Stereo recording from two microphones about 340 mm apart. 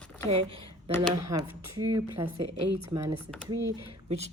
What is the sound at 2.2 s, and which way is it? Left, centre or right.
Speech, right.